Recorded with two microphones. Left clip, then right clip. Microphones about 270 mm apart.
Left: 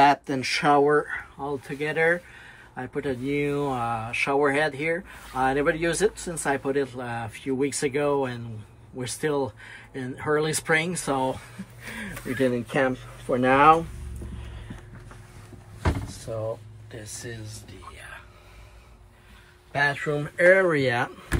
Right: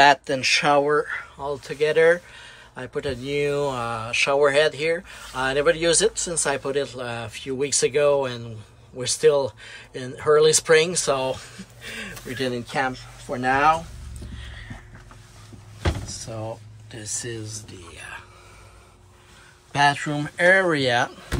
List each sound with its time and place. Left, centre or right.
0.0 s speech: centre
19.7 s speech: centre